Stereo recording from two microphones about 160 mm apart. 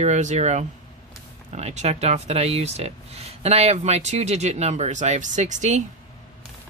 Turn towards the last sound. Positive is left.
turn(degrees=-45)  # may be behind; listen again after turning